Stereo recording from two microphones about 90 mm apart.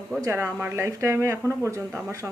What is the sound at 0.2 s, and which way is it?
Speech, 30° right (ahead or behind).